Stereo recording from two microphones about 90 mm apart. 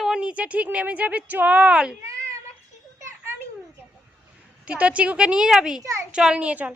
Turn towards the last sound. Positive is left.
turn(degrees=-15)  # may be behind; listen again after turning